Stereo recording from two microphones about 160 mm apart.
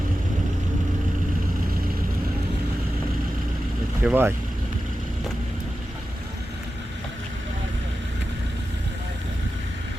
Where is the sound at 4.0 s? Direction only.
10° right (ahead or behind).